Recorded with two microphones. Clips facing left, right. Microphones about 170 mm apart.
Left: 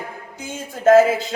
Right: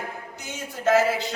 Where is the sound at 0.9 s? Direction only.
50° left (ahead or behind).